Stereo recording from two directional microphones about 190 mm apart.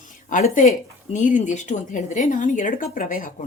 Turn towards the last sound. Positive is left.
turn(degrees=45)  # may be behind; listen again after turning